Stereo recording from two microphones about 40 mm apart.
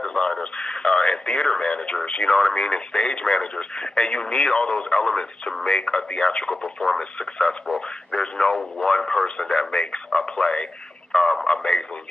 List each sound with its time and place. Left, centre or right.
0.0 s speech: centre
7.0 s speech: centre
11.4 s radio: centre